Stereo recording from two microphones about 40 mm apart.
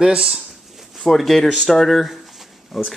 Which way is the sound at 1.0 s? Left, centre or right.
Centre.